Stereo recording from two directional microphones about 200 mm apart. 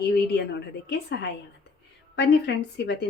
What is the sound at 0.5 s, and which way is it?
A woman's voice, 55° left (ahead or behind).